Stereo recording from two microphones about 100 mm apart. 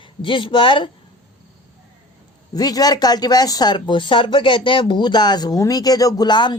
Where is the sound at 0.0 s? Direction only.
60° left (ahead or behind).